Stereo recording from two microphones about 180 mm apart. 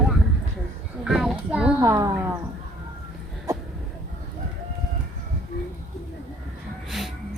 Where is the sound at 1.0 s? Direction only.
Centre (ahead or behind).